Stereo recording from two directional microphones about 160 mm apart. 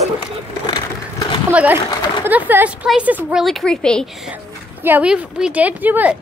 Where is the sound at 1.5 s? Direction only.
10° right (ahead or behind).